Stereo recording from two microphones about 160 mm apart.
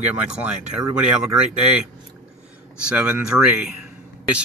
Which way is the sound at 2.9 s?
5° right (ahead or behind).